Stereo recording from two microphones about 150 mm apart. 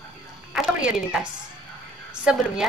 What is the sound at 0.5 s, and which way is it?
Speech, 5° right (ahead or behind).